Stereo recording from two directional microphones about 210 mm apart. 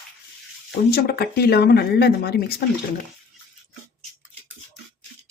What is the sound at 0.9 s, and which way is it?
Speech, 45° left (ahead or behind).